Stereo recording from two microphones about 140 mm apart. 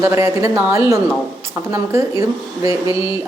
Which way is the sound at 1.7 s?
20° right (ahead or behind).